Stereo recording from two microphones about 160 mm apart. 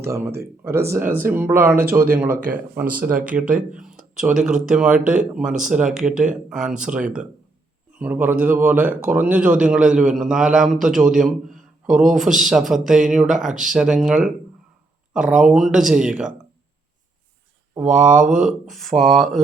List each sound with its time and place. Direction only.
0.0 s speech: 15° right (ahead or behind)
17.7 s speech: 5° right (ahead or behind)